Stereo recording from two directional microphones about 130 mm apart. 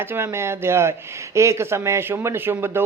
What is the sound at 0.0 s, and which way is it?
Speech, 20° right (ahead or behind).